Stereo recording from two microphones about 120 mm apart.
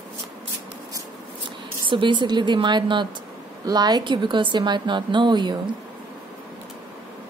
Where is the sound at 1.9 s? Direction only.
40° right (ahead or behind).